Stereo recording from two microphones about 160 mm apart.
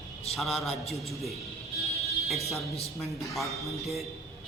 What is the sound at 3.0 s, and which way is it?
Speech, centre (ahead or behind).